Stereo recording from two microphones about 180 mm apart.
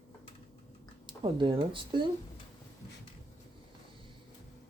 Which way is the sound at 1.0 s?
25° right (ahead or behind).